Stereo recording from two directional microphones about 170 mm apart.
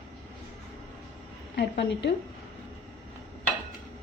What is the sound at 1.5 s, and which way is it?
Speech, 80° left.